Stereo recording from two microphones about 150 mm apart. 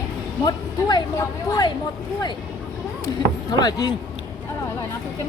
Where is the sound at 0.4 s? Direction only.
30° left (ahead or behind).